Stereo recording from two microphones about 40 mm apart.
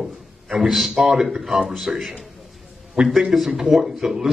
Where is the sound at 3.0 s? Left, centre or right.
Right.